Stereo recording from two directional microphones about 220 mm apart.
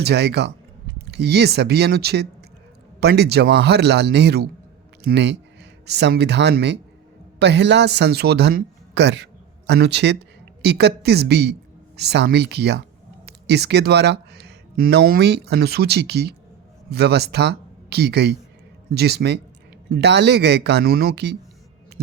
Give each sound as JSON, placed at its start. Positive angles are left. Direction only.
{"t": 0.0, "sound": "speech", "side_deg": -50}